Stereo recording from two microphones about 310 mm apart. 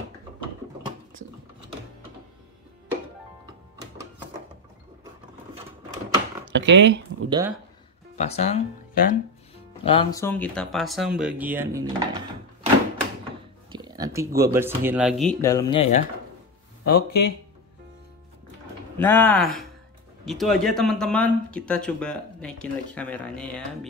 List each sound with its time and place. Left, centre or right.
6.5 s speech: right
7.2 s speech: centre
8.2 s speech: left
9.8 s speech: centre
13.7 s a sound: centre
14.8 s speech: centre
16.8 s speech: left
18.9 s speech: centre